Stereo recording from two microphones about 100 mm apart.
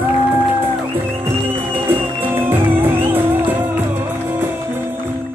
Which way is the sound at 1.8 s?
20° right (ahead or behind).